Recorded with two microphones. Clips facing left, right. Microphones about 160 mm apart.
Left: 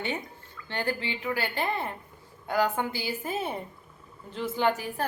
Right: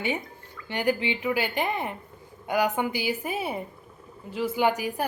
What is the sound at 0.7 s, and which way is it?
A woman's voice, 15° right (ahead or behind).